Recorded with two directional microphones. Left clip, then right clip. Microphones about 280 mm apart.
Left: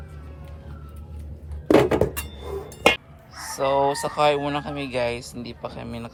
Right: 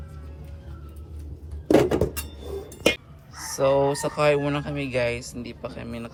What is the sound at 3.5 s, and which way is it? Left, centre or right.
Speech, centre.